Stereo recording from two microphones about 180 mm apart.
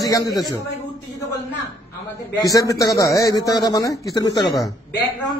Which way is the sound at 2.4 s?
20° left (ahead or behind).